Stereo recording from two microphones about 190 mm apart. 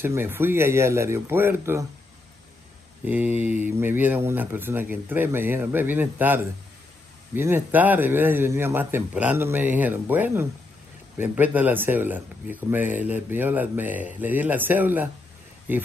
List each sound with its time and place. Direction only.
0.0 s speech: 10° right (ahead or behind)
3.1 s speech: 10° right (ahead or behind)